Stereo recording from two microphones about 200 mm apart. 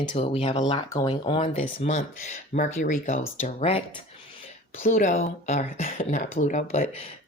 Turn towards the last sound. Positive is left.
turn(degrees=30)  # may be behind; listen again after turning